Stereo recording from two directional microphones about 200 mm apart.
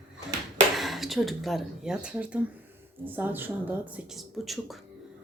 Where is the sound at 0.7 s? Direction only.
Centre (ahead or behind).